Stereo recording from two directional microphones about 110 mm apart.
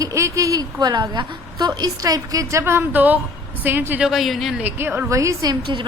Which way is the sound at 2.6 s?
20° right (ahead or behind).